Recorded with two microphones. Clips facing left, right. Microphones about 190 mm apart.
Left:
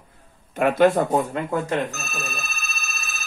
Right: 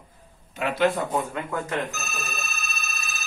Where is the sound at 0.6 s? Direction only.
50° left (ahead or behind).